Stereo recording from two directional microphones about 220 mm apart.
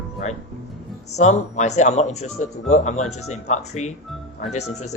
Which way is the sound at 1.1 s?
30° left (ahead or behind).